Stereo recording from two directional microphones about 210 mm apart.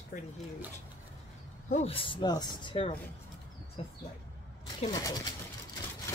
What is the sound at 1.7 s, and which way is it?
Speech, 25° left (ahead or behind).